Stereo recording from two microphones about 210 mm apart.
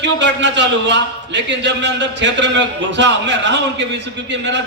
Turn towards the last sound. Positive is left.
turn(degrees=-55)  # may be behind; listen again after turning